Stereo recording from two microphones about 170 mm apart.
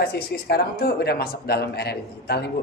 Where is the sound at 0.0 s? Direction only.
70° left (ahead or behind).